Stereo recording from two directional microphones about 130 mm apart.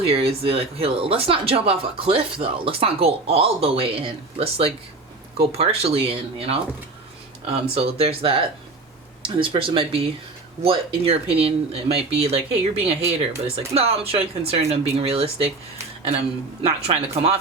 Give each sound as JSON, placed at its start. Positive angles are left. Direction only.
{"t": 0.0, "sound": "speech", "side_deg": -50}
{"t": 16.6, "sound": "speech", "side_deg": -50}